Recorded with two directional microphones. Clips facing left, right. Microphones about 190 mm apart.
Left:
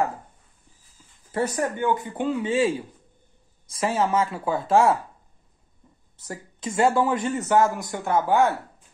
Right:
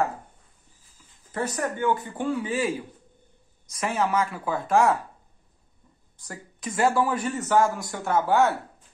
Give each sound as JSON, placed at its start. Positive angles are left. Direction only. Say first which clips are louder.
{"t": 1.3, "sound": "speech", "louder": "left 3 dB", "side_deg": 35}
{"t": 1.8, "sound": "speech", "louder": "left 1 dB", "side_deg": 20}
{"t": 6.1, "sound": "speech", "louder": "left 4 dB", "side_deg": 25}